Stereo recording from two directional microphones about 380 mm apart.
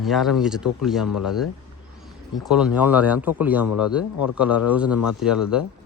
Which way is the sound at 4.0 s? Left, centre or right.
Left.